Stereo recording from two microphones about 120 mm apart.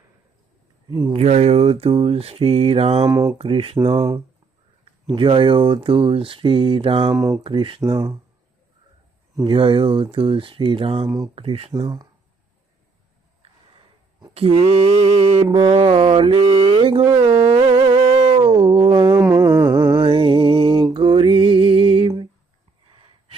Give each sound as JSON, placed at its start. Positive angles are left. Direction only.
{"t": 1.1, "sound": "mantra", "side_deg": -60}
{"t": 3.1, "sound": "speech", "side_deg": -30}
{"t": 3.3, "sound": "speech", "side_deg": -50}
{"t": 5.1, "sound": "speech", "side_deg": -45}
{"t": 7.1, "sound": "speech", "side_deg": -25}
{"t": 7.4, "sound": "speech", "side_deg": -45}
{"t": 7.8, "sound": "speech", "side_deg": -25}
{"t": 9.5, "sound": "speech", "side_deg": -45}
{"t": 13.4, "sound": "a sound", "side_deg": -50}
{"t": 15.5, "sound": "speech", "side_deg": -55}
{"t": 16.4, "sound": "speech", "side_deg": -40}
{"t": 17.2, "sound": "a sound", "side_deg": -45}
{"t": 19.9, "sound": "music", "side_deg": -45}